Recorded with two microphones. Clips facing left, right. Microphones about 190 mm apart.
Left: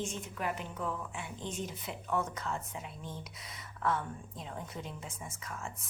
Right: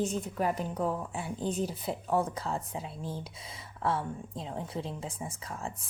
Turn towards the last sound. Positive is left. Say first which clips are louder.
# right 4 dB
turn(degrees=-35)  # may be behind; listen again after turning